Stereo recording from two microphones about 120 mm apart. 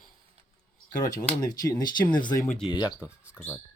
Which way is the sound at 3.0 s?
10° right (ahead or behind).